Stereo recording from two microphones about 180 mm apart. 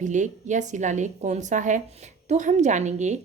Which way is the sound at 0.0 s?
40° right (ahead or behind).